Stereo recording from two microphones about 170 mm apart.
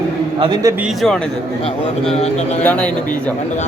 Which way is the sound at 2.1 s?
40° left (ahead or behind).